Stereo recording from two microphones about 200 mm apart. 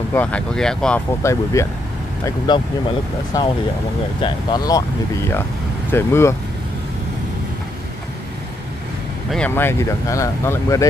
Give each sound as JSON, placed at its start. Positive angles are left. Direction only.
{"t": 0.1, "sound": "speech", "side_deg": 5}
{"t": 4.2, "sound": "speech", "side_deg": 20}
{"t": 5.9, "sound": "speech", "side_deg": 10}
{"t": 9.3, "sound": "speech", "side_deg": 10}